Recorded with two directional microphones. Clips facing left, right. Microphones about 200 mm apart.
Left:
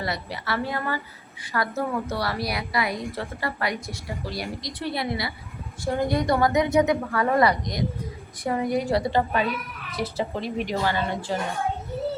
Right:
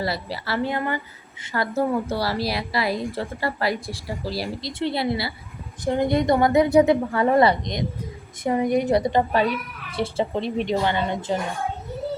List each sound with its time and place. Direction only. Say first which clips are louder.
0.0 s a woman's voice: right 3 dB; 30° right (ahead or behind)